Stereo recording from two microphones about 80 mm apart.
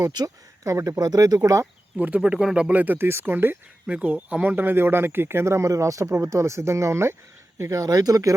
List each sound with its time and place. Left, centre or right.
0.0 s speech: right
0.6 s speech: right
2.0 s speech: centre
3.8 s speech: centre; by 8.4 s right